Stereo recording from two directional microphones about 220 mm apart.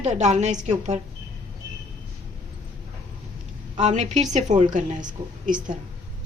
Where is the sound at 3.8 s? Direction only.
30° right (ahead or behind).